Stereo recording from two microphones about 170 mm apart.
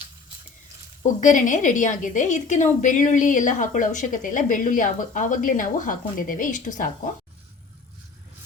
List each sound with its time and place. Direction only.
1.0 s a woman's voice: 50° left (ahead or behind)